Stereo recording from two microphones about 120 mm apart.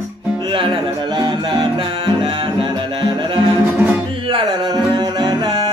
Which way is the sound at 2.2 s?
45° right (ahead or behind).